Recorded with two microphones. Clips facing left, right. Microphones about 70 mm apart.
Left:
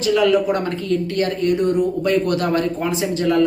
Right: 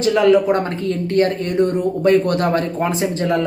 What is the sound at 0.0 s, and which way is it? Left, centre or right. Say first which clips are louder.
A woman's voice: right 3 dB; right.